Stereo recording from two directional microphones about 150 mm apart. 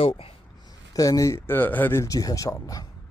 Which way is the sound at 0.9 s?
25° left (ahead or behind).